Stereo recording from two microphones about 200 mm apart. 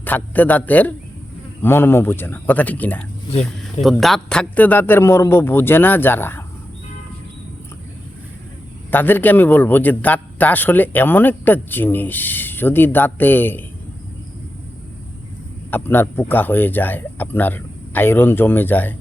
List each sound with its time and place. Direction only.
0.0 s a man's voice: 10° left (ahead or behind)
8.9 s a man's voice: 10° left (ahead or behind)
15.7 s a man's voice: 10° left (ahead or behind)